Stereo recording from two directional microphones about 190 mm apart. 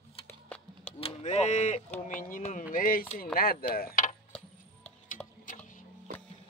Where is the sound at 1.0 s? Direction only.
35° left (ahead or behind).